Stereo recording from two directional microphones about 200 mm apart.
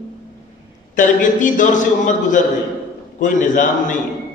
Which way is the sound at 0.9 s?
40° left (ahead or behind).